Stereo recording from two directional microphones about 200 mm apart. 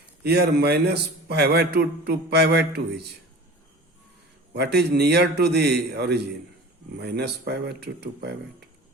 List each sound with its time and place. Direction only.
0.2 s a man's voice: 55° right (ahead or behind)
4.5 s a man's voice: 55° right (ahead or behind)